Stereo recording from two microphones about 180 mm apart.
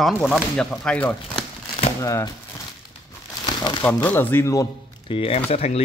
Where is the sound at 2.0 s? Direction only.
15° left (ahead or behind).